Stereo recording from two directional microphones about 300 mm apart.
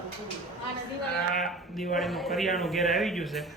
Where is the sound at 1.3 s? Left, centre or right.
Centre.